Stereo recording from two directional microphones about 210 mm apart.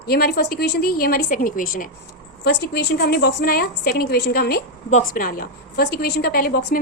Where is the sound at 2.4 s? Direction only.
50° left (ahead or behind).